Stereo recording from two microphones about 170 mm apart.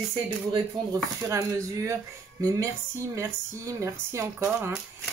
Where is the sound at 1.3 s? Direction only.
15° right (ahead or behind).